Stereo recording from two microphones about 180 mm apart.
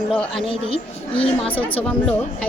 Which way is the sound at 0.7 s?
30° left (ahead or behind).